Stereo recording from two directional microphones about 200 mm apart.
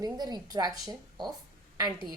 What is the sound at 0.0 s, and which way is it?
A woman's voice, 20° right (ahead or behind).